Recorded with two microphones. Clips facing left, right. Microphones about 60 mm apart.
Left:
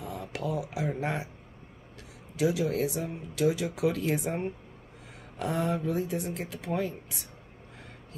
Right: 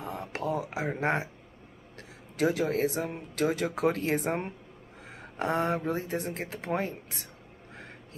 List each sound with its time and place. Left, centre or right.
0.0 s speech: right
5.4 s speech: right